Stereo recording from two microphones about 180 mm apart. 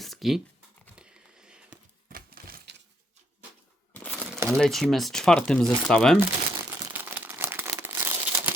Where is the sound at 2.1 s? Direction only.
55° right (ahead or behind).